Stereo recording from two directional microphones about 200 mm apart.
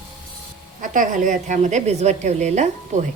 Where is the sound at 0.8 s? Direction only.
40° right (ahead or behind).